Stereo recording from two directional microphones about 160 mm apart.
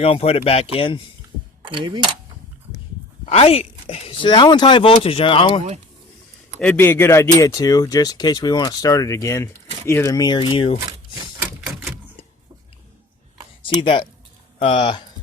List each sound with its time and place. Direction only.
0.0 s speech: 40° left (ahead or behind)
1.6 s speech: 30° right (ahead or behind)
3.2 s speech: 40° left (ahead or behind)
6.6 s speech: 10° left (ahead or behind); by 10.8 s 30° left (ahead or behind)
13.6 s speech: 35° left (ahead or behind)